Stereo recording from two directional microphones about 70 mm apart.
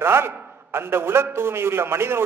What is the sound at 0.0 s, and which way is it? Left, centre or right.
A man's voice, right.